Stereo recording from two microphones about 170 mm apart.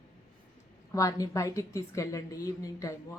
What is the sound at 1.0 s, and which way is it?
Speech, 20° left (ahead or behind).